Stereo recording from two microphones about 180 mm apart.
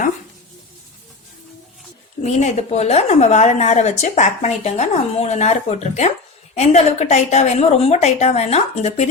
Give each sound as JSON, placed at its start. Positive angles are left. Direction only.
{"t": 2.2, "sound": "a woman's voice", "side_deg": 40}